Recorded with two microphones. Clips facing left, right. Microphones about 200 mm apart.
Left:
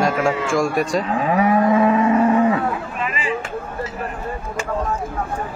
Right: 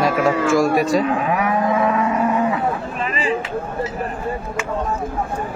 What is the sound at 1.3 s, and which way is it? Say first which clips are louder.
Livestock: left 3 dB; 30° left (ahead or behind).